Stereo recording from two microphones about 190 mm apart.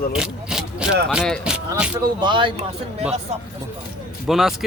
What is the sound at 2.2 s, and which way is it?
Speech, 25° right (ahead or behind).